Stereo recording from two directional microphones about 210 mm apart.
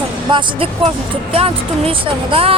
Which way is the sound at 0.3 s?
20° right (ahead or behind).